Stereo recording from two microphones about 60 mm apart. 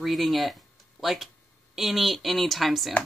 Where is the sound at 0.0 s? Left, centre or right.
Centre.